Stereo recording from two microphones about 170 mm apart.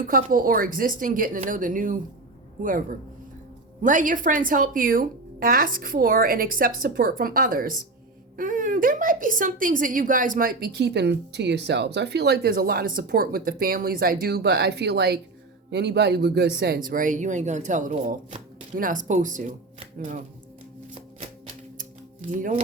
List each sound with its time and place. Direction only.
0.1 s speech: 55° right (ahead or behind)
3.8 s a woman's voice: 50° right (ahead or behind)
22.3 s speech: 50° right (ahead or behind)